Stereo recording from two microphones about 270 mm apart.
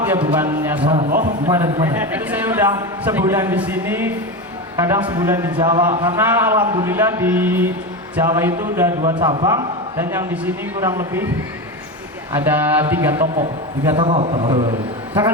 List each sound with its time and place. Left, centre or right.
0.3 s a man's voice: centre
0.9 s a man's voice: right
1.5 s a man's voice: centre
12.3 s a man's voice: centre
13.9 s a man's voice: right